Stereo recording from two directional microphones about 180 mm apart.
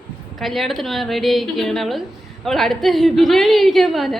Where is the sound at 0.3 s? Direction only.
Centre (ahead or behind).